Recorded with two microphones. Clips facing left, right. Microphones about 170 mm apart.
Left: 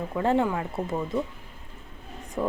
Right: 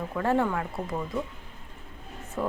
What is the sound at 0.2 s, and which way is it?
Speech, 20° left (ahead or behind).